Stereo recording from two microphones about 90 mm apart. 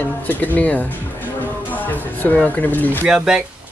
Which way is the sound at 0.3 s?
20° left (ahead or behind).